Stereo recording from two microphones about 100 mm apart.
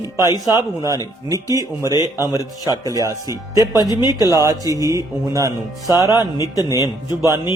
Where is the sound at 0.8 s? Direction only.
35° right (ahead or behind).